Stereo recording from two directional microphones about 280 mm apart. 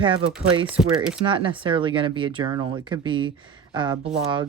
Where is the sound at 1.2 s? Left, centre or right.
Centre.